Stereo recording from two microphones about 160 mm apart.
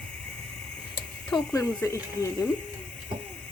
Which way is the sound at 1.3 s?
25° left (ahead or behind).